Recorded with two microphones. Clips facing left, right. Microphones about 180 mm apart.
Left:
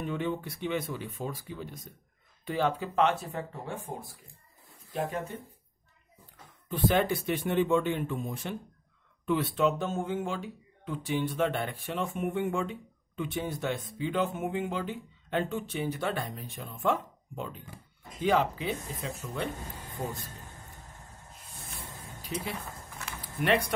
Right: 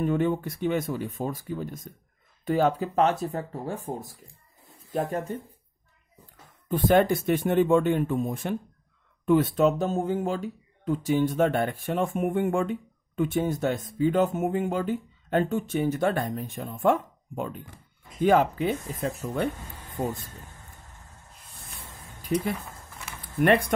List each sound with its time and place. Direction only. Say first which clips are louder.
0.0 s speech: right 7 dB; 45° right (ahead or behind)
6.7 s speech: right 6 dB; 45° right (ahead or behind)
21.3 s spray: left 2 dB; centre (ahead or behind)
22.3 s speech: right 9 dB; 50° right (ahead or behind)